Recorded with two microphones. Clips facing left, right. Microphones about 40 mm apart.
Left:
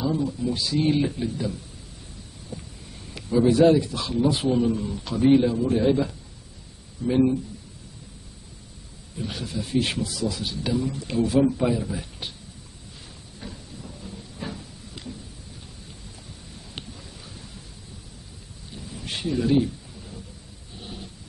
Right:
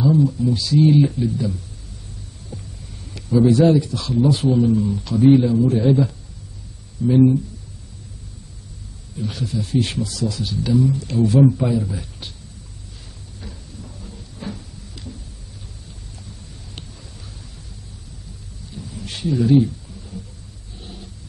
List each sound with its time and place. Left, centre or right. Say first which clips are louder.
0.0 s speech: right 8 dB; centre
3.3 s speech: right 3 dB; centre
9.2 s speech: right 5 dB; centre
13.4 s cupboard open or close: even; centre
18.7 s a sound: right 1 dB; centre